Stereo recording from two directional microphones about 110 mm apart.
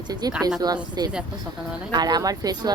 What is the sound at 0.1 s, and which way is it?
Speech, 35° right (ahead or behind).